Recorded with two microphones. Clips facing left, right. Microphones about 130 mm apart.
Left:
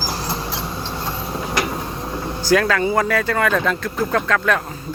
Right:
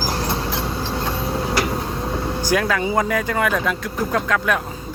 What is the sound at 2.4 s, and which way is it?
Speech, 15° right (ahead or behind).